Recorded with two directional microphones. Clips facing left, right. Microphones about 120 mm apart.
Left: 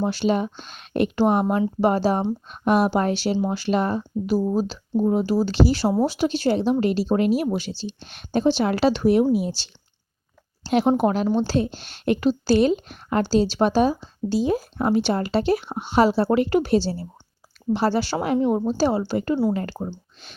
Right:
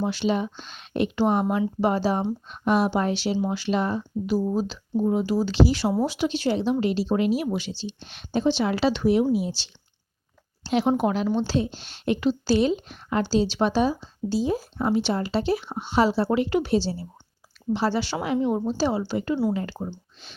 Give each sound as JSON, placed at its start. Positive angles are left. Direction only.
{"t": 0.0, "sound": "a woman's voice", "side_deg": 45}
{"t": 19.7, "sound": "speech", "side_deg": 30}